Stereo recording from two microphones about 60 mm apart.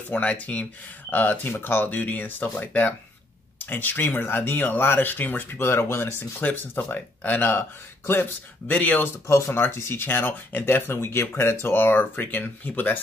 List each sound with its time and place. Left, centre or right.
0.1 s speech: left
6.4 s speech: left
9.3 s speech: left